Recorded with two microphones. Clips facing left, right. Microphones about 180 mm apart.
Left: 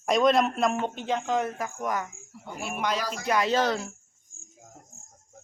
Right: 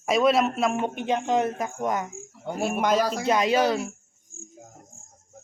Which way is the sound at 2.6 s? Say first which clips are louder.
Right 7 dB; 45° right (ahead or behind).